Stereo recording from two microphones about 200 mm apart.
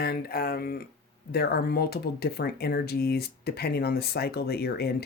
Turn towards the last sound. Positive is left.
turn(degrees=50)  # may be behind; listen again after turning